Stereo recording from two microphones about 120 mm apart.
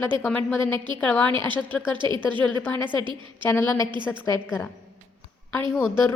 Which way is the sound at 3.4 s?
15° left (ahead or behind).